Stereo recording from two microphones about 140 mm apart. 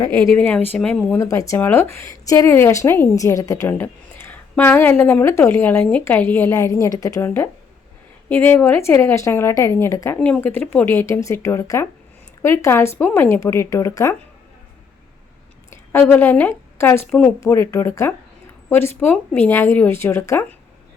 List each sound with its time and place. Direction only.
0.3 s a woman's voice: 10° left (ahead or behind)
1.1 s a woman's voice: 25° left (ahead or behind)
8.3 s a woman's voice: 15° left (ahead or behind)
15.7 s a woman's voice: 15° left (ahead or behind)